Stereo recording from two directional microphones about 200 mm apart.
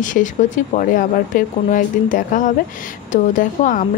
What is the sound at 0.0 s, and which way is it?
A woman's voice, 40° left (ahead or behind).